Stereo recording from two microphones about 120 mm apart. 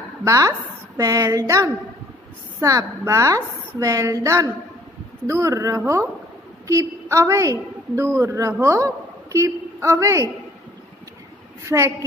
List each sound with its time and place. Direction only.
0.2 s a woman's voice: 30° right (ahead or behind)
11.6 s a woman's voice: 25° right (ahead or behind)